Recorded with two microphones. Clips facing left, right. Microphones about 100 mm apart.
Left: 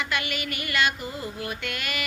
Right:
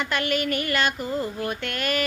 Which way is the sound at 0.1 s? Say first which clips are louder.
Right 6 dB; 40° right (ahead or behind).